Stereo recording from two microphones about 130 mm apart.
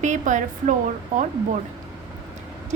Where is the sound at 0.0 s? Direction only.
75° right (ahead or behind).